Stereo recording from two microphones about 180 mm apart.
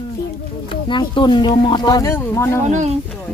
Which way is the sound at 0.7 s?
25° left (ahead or behind).